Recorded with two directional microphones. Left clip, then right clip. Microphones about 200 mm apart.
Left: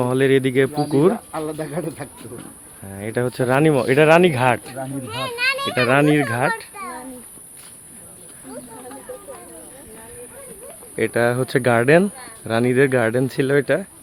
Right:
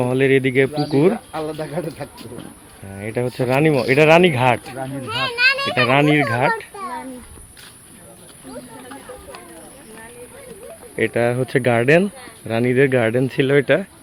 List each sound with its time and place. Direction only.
0.0 s speech: 10° left (ahead or behind)
1.1 s speech: 55° left (ahead or behind)
3.0 s speech: 15° left (ahead or behind)
5.0 s a child's voice: 40° right (ahead or behind)
5.8 s speech: 5° left (ahead or behind)
10.9 s speech: 10° left (ahead or behind)